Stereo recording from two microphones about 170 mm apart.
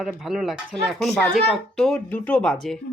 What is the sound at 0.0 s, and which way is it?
Speech, centre (ahead or behind).